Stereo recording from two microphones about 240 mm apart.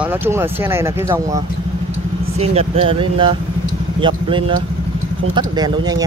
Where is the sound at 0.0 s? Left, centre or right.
Centre.